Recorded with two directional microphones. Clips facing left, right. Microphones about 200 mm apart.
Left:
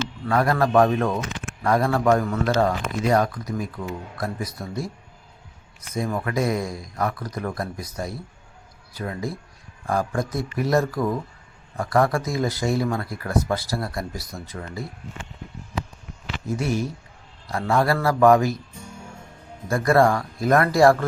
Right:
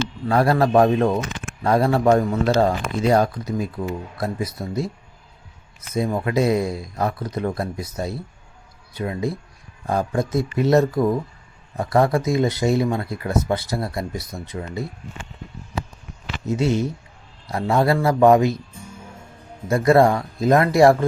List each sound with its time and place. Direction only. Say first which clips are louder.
0.3 s speech: right 3 dB; 30° right (ahead or behind)
5.9 s speech: right 4 dB; 25° right (ahead or behind)
16.5 s speech: right 4 dB; 25° right (ahead or behind)
19.7 s speech: right 3 dB; 20° right (ahead or behind)